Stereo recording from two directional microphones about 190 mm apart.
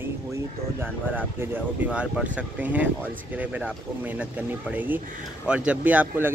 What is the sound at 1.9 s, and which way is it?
Speech, 5° right (ahead or behind).